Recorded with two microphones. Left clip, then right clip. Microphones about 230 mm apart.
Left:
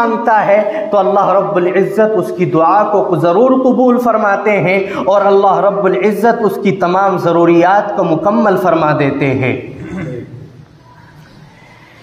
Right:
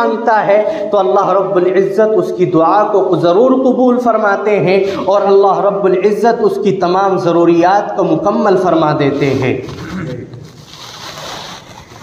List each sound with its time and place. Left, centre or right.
0.0 s a man's voice: left